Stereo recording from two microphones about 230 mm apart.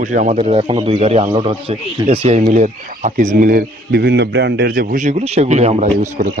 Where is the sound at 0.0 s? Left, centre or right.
Right.